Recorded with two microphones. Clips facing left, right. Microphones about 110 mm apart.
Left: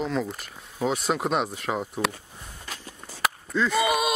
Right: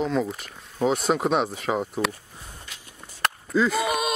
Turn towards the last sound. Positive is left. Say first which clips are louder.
# even
turn(degrees=0)  # may be behind; listen again after turning